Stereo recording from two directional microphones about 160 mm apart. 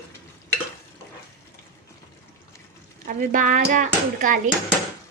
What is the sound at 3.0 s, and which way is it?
A child's voice, 60° right (ahead or behind).